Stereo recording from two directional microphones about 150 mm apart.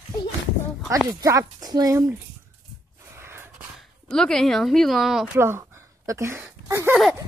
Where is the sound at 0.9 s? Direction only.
20° right (ahead or behind).